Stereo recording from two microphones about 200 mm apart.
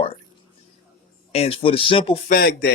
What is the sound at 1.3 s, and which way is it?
Speech, 30° left (ahead or behind).